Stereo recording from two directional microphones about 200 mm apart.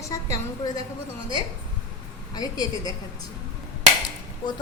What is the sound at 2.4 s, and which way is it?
Speech, 20° left (ahead or behind).